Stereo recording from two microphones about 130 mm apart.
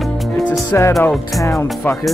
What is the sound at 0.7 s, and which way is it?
Speech, 20° left (ahead or behind).